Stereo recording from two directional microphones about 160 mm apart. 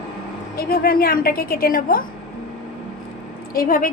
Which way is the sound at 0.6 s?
70° left (ahead or behind).